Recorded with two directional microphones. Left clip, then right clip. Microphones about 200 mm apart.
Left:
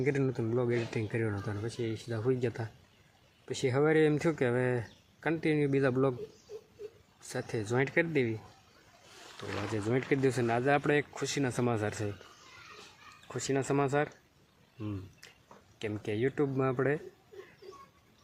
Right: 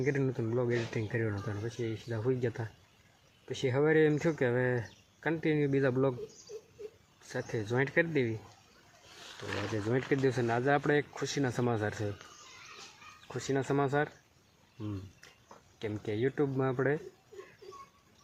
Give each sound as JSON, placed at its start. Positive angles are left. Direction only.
{"t": 0.0, "sound": "speech", "side_deg": 15}
{"t": 7.3, "sound": "speech", "side_deg": 15}
{"t": 9.7, "sound": "speech", "side_deg": 10}
{"t": 13.2, "sound": "speech", "side_deg": 10}
{"t": 15.8, "sound": "speech", "side_deg": 10}